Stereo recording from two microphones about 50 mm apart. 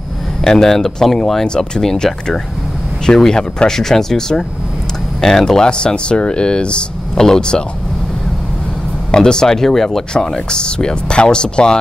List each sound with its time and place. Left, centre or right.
0.4 s speech: centre
9.1 s speech: centre